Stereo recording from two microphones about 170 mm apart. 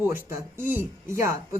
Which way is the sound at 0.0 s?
15° right (ahead or behind).